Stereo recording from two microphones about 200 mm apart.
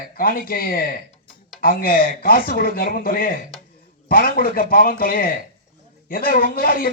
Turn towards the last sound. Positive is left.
turn(degrees=45)  # may be behind; listen again after turning